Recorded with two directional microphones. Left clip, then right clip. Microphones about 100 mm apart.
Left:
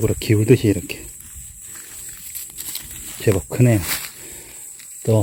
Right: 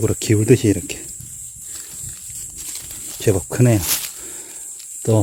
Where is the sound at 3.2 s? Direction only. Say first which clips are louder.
Right 1 dB; 15° right (ahead or behind).